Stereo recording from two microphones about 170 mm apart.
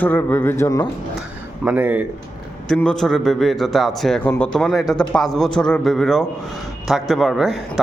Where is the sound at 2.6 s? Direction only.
5° left (ahead or behind).